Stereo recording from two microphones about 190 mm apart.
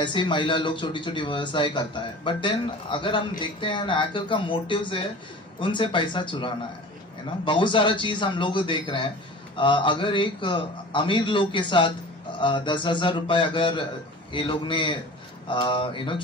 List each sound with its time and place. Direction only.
0.0 s a man's voice: 25° left (ahead or behind)